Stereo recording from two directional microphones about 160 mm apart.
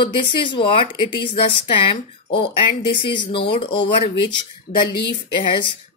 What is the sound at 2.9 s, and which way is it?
Speech, 30° left (ahead or behind).